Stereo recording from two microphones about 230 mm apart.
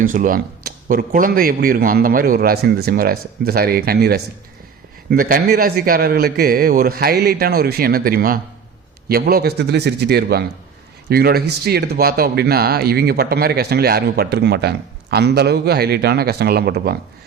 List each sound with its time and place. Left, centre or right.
0.0 s a man's voice: right